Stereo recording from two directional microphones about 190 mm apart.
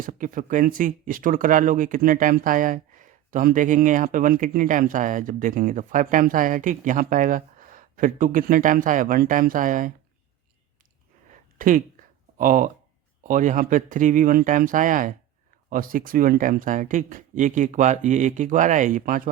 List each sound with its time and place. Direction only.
0.0 s speech: 45° right (ahead or behind)
11.5 s speech: 45° right (ahead or behind)